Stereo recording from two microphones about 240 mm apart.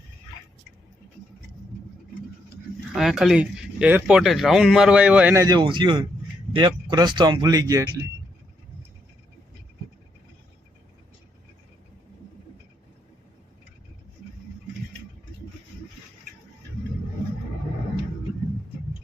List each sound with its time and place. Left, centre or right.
2.9 s speech: centre